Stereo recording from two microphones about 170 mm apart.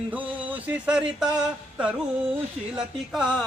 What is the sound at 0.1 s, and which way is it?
Music, 10° right (ahead or behind).